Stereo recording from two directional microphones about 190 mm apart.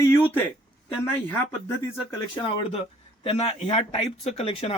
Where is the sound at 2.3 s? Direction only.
25° left (ahead or behind).